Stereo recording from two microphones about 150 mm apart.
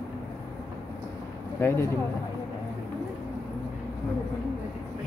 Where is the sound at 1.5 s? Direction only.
15° left (ahead or behind).